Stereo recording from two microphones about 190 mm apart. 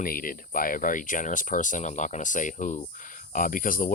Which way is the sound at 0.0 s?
50° left (ahead or behind).